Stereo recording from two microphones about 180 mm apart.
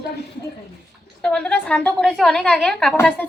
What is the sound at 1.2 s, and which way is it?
A woman's voice, 5° left (ahead or behind).